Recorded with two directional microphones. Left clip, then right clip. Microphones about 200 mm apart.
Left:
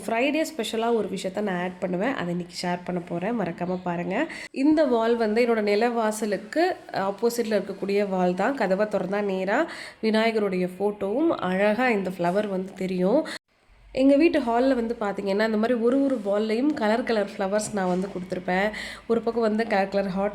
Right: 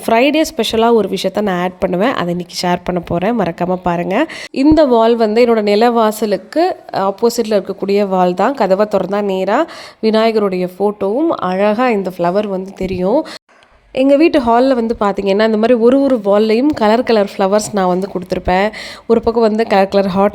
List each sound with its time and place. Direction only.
0.0 s speech: 45° right (ahead or behind)